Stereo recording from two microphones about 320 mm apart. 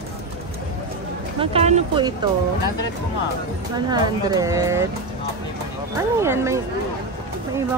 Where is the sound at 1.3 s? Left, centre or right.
Centre.